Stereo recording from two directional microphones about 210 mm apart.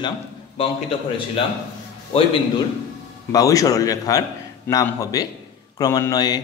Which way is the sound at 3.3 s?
15° left (ahead or behind).